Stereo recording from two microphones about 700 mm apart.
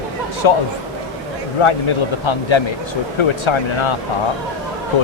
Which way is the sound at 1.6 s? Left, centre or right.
Left.